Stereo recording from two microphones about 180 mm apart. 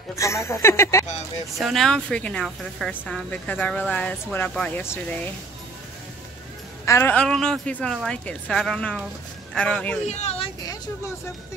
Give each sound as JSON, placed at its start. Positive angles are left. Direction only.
{"t": 0.1, "sound": "speech", "side_deg": 15}
{"t": 1.6, "sound": "speech", "side_deg": 0}
{"t": 6.9, "sound": "a woman's voice", "side_deg": 10}
{"t": 10.0, "sound": "speech", "side_deg": 35}